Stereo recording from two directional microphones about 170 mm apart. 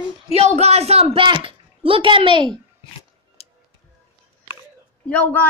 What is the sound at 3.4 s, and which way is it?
Music, 35° left (ahead or behind).